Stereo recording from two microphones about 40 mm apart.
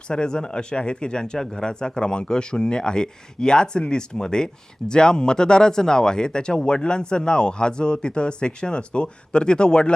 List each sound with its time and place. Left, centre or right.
0.1 s speech: left